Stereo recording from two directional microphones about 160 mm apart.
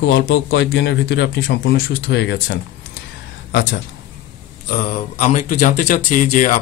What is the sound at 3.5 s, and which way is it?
Speech, 90° left.